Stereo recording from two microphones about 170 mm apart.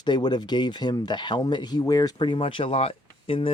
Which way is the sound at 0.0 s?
25° left (ahead or behind).